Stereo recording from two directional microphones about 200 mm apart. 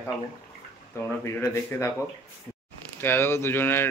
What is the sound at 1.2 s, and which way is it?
Speech, 15° left (ahead or behind).